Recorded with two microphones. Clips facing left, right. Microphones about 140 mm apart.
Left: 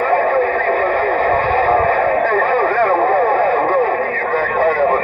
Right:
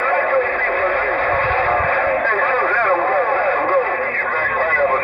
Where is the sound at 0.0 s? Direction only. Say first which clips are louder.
Left 3 dB; 35° left (ahead or behind).